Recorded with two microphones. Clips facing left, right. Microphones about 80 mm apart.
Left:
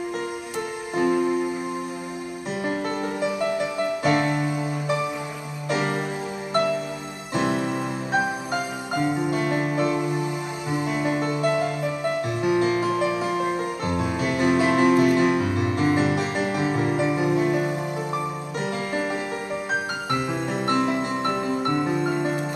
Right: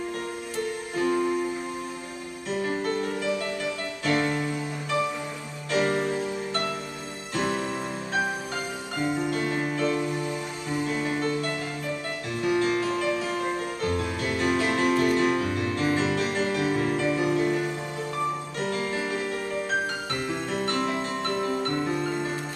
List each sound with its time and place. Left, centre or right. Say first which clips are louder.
0.9 s music: left 4 dB; centre
2.5 s music: even; centre